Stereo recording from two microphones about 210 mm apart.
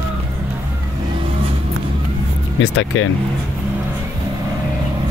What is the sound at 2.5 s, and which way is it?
Speech, 70° left (ahead or behind).